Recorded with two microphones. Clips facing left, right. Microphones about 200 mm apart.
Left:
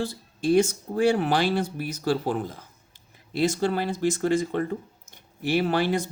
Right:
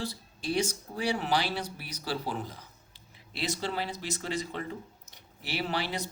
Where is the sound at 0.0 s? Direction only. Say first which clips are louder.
Left 9 dB; 50° left (ahead or behind).